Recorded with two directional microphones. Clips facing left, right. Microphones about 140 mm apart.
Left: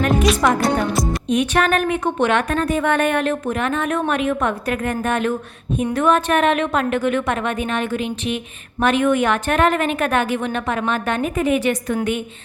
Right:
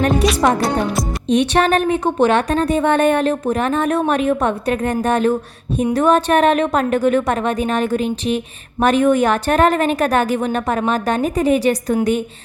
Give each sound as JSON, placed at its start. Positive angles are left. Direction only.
{"t": 0.4, "sound": "a woman's voice", "side_deg": -35}